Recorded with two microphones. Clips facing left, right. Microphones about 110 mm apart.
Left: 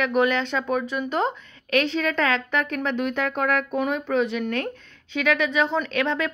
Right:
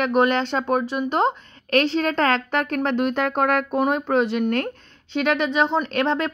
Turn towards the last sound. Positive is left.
turn(degrees=-40)  # may be behind; listen again after turning